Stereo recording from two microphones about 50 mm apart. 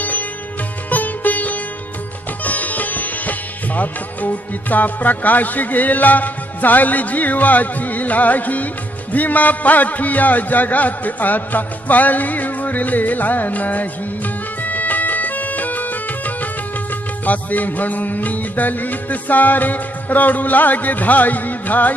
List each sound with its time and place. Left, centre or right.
0.0 s sitar: left
0.9 s music: left
2.4 s sitar: left
3.8 s music: left